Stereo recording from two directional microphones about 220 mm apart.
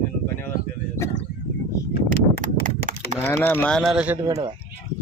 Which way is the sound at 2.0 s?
40° right (ahead or behind).